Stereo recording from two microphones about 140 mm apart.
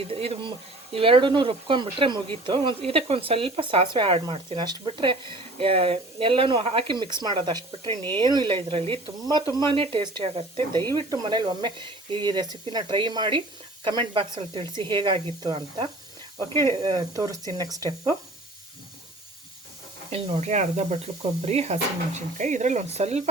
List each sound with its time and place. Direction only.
0.1 s speech: 40° right (ahead or behind)
16.9 s speech: 25° right (ahead or behind)
20.1 s speech: 45° right (ahead or behind)